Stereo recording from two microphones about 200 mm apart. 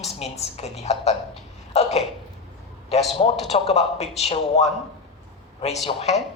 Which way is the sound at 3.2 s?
30° left (ahead or behind).